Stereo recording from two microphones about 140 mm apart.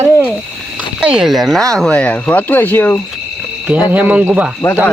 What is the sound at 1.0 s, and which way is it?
Speech, 5° right (ahead or behind).